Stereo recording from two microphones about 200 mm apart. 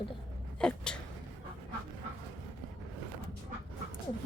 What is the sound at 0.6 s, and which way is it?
Speech, 5° left (ahead or behind).